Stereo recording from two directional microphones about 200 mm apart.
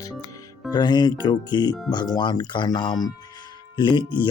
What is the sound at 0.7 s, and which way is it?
Speech, 20° left (ahead or behind).